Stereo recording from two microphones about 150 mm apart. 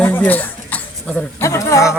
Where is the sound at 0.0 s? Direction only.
15° left (ahead or behind).